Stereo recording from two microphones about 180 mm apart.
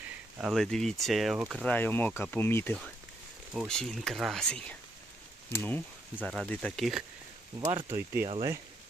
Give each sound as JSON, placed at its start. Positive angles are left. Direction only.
{"t": 0.3, "sound": "speech", "side_deg": 0}
{"t": 1.6, "sound": "speech", "side_deg": 10}
{"t": 7.6, "sound": "speech", "side_deg": -35}
{"t": 7.9, "sound": "speech", "side_deg": -15}